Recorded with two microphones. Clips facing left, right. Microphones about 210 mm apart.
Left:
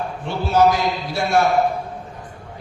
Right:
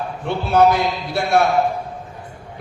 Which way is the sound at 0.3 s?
60° right (ahead or behind).